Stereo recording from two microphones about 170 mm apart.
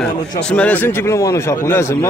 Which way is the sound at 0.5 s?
10° left (ahead or behind).